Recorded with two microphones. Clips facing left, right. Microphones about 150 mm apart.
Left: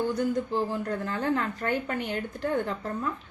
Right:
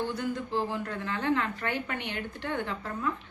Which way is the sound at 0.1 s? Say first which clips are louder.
Left 4 dB; 40° left (ahead or behind).